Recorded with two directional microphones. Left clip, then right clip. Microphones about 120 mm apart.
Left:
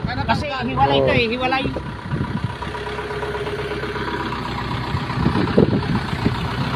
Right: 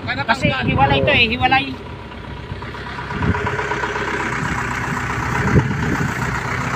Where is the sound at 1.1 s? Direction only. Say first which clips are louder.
Right 4 dB; 55° right (ahead or behind).